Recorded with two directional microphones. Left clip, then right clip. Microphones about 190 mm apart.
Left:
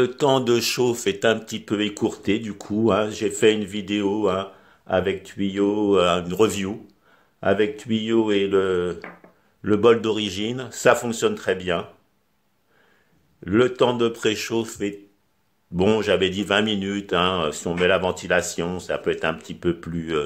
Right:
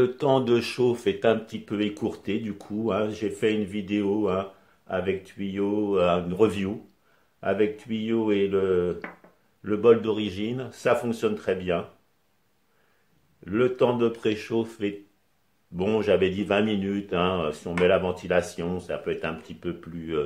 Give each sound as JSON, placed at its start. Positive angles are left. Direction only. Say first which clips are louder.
{"t": 0.2, "sound": "speech", "louder": "left 3 dB", "side_deg": 50}
{"t": 13.5, "sound": "speech", "louder": "left 4 dB", "side_deg": 40}